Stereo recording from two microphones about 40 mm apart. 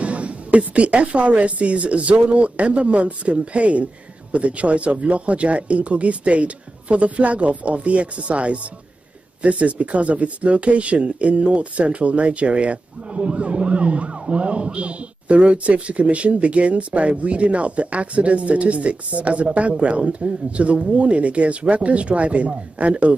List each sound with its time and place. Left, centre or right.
0.0 s speech: right